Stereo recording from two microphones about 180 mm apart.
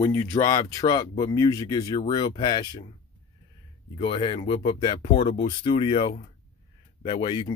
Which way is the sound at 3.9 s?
30° left (ahead or behind).